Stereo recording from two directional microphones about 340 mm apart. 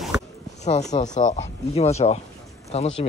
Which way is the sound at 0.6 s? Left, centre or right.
Centre.